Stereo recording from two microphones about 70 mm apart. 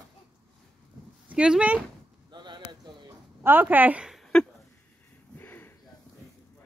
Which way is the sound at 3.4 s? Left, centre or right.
Right.